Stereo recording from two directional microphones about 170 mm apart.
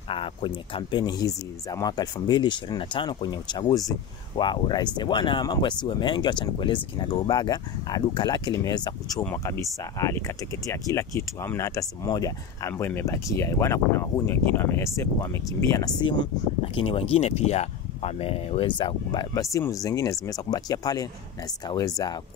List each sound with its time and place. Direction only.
0.1 s speech: 30° left (ahead or behind)